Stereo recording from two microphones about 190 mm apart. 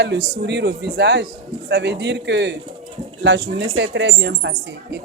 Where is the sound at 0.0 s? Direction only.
65° right (ahead or behind).